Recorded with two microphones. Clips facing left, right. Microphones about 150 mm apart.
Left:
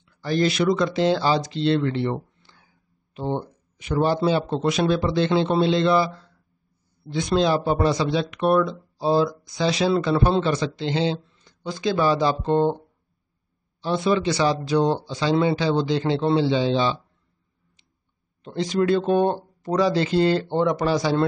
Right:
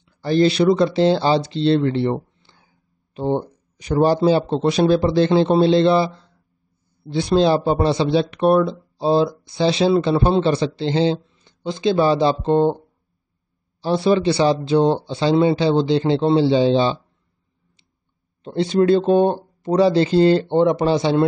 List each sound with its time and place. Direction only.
0.2 s speech: 30° right (ahead or behind)
3.7 s a man's voice: 35° right (ahead or behind); by 12.7 s 20° right (ahead or behind)
13.7 s speech: 35° right (ahead or behind)
18.4 s speech: 30° right (ahead or behind)